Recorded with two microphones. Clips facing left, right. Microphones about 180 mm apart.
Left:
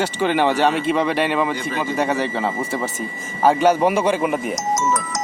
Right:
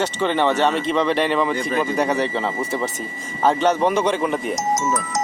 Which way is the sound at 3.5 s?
10° left (ahead or behind).